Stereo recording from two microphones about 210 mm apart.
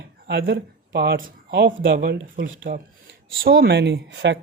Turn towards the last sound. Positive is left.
turn(degrees=-55)  # may be behind; listen again after turning